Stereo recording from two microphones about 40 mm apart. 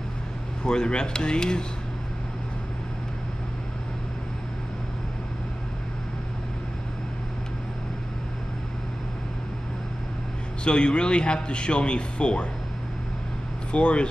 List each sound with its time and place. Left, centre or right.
0.7 s a man's voice: left
10.6 s a man's voice: left
13.7 s speech: left